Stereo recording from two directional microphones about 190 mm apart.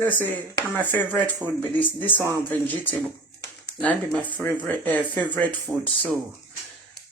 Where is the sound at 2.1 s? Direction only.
15° right (ahead or behind).